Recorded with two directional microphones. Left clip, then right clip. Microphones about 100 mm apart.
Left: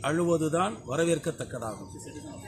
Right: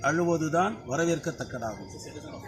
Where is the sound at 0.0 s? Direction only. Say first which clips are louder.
Right 1 dB; 30° left (ahead or behind).